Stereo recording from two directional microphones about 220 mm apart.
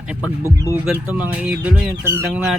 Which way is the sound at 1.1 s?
5° right (ahead or behind).